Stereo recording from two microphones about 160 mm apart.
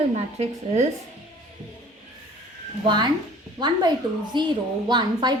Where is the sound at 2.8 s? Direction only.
25° right (ahead or behind).